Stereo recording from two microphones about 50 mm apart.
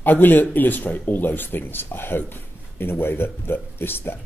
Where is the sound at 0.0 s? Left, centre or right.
Left.